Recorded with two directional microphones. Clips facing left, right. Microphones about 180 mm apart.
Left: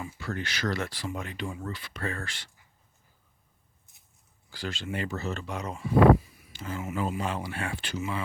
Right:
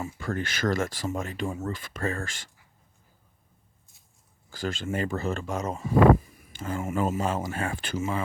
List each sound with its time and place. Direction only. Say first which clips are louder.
0.0 s speech: right 4 dB; 45° right (ahead or behind)
4.4 s speech: right 4 dB; 45° right (ahead or behind)